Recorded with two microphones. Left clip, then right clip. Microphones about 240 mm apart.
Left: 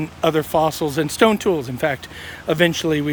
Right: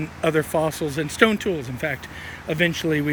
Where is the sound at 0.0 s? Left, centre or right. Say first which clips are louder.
Left 3 dB; centre.